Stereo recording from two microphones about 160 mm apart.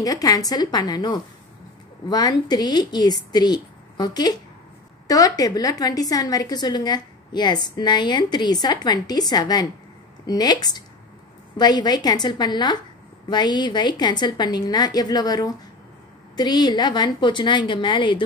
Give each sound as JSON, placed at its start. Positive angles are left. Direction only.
{"t": 0.0, "sound": "a woman's voice", "side_deg": 20}